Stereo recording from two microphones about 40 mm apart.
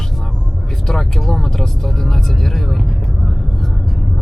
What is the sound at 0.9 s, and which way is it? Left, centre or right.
Vehicle, centre.